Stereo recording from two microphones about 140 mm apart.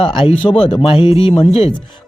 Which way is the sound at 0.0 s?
40° left (ahead or behind).